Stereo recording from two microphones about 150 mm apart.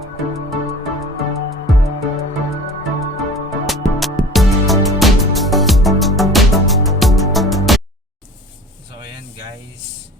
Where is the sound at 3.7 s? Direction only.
Centre (ahead or behind).